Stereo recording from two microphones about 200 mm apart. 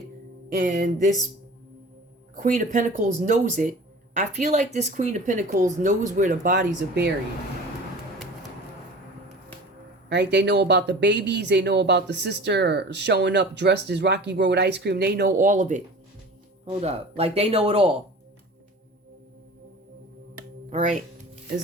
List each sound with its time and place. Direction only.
0.6 s speech: 40° right (ahead or behind)
2.3 s speech: 40° right (ahead or behind)
10.1 s speech: 60° right (ahead or behind)
15.4 s speech: 40° right (ahead or behind)
16.8 s speech: 30° right (ahead or behind)
20.7 s speech: 40° right (ahead or behind)